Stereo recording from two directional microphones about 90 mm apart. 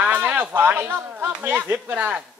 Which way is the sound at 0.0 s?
20° right (ahead or behind).